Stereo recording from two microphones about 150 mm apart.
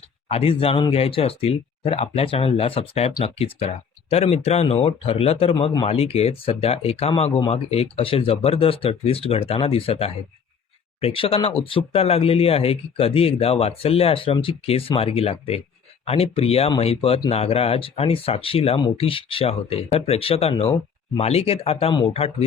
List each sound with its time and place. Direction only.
0.3 s speech: 40° left (ahead or behind)